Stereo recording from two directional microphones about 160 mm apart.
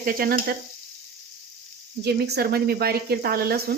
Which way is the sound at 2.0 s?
90° right.